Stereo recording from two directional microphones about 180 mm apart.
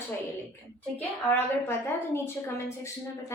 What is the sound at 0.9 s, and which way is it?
A woman's voice, 10° left (ahead or behind).